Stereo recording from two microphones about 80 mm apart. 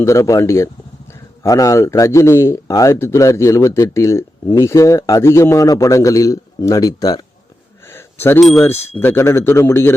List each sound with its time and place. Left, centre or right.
0.0 s speech: left
7.9 s a sound: left
8.4 s speech: centre
8.6 s speech: left